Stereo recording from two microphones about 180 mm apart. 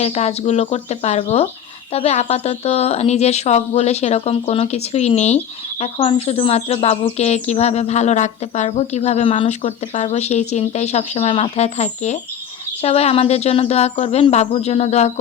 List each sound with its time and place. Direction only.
0.0 s speech: 35° left (ahead or behind)